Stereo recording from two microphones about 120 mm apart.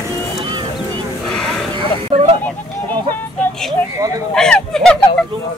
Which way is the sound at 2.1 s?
50° right (ahead or behind).